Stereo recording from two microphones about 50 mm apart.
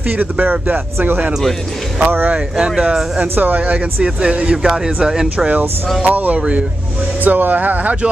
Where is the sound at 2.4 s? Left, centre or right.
Centre.